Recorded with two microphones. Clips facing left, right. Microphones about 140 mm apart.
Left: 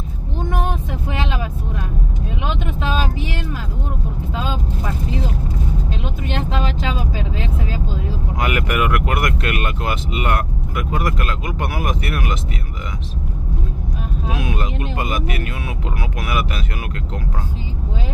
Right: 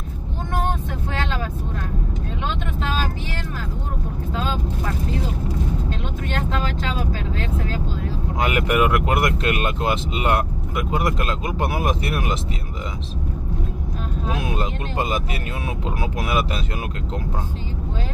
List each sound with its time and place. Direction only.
8.4 s speech: 25° right (ahead or behind)
14.4 s speech: 30° right (ahead or behind)